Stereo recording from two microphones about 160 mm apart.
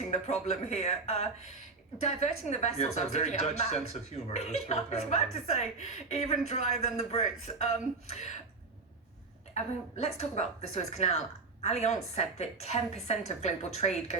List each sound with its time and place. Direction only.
0.1 s speech: 45° left (ahead or behind)
10.0 s speech: 45° left (ahead or behind)